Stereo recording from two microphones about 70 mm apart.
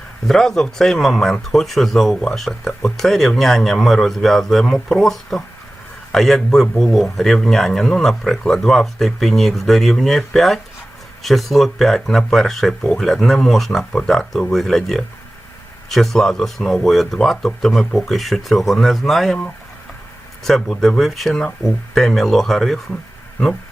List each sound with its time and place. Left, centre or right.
0.3 s speech: centre
20.4 s speech: centre